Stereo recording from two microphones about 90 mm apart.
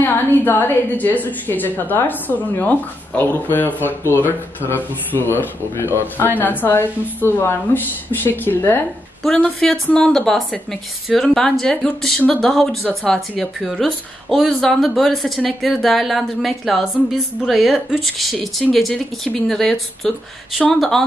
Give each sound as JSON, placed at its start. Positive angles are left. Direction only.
{"t": 0.0, "sound": "a woman's voice", "side_deg": 25}
{"t": 9.2, "sound": "a woman's voice", "side_deg": 5}